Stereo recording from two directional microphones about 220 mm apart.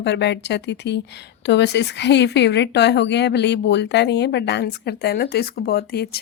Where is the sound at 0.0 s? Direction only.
50° left (ahead or behind).